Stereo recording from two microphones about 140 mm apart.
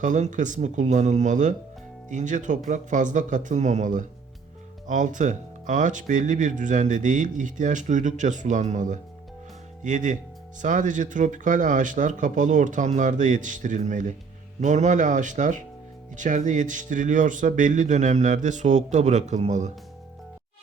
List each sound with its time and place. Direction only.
0.0 s speech: 65° right (ahead or behind)